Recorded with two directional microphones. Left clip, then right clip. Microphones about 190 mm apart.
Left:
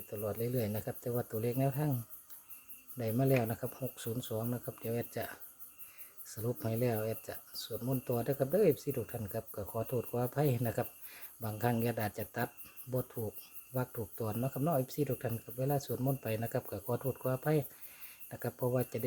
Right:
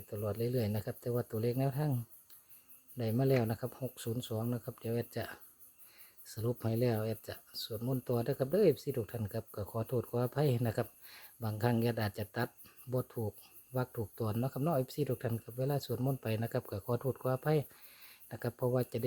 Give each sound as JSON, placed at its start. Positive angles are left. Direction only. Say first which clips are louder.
{"t": 0.1, "sound": "speech", "louder": "right 1 dB", "side_deg": -45}
{"t": 3.0, "sound": "speech", "louder": "even", "side_deg": -45}